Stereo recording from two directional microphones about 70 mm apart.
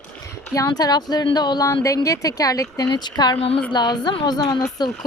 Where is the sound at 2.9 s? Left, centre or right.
Left.